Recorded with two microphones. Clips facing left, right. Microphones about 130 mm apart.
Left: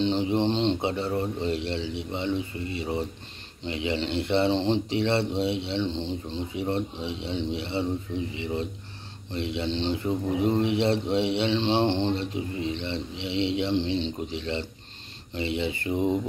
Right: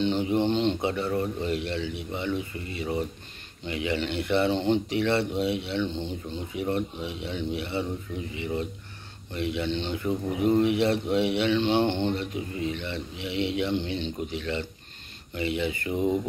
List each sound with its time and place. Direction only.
0.0 s speech: 30° left (ahead or behind)
9.3 s speech: 25° left (ahead or behind)